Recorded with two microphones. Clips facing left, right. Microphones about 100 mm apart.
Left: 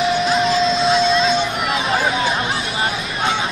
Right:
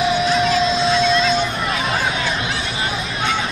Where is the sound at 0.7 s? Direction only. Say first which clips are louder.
Left 1 dB; centre (ahead or behind).